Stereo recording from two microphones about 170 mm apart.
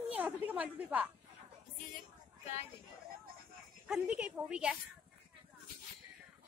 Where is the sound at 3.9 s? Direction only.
5° right (ahead or behind).